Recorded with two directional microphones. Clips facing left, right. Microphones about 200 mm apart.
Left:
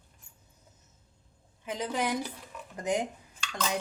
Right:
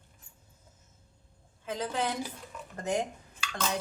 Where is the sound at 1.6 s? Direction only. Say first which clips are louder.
Left 1 dB; 15° left (ahead or behind).